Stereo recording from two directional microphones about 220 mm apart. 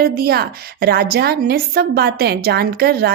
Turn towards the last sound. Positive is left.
turn(degrees=-45)  # may be behind; listen again after turning